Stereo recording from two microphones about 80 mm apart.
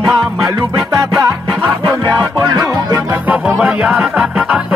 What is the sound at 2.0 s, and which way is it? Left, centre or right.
Music, right.